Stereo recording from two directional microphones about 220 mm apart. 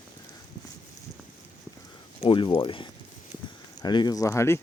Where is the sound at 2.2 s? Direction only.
20° left (ahead or behind).